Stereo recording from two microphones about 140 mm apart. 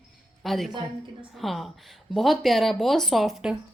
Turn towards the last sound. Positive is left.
turn(degrees=-5)  # may be behind; listen again after turning